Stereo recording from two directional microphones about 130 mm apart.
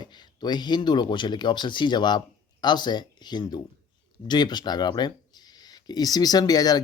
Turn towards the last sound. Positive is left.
turn(degrees=30)  # may be behind; listen again after turning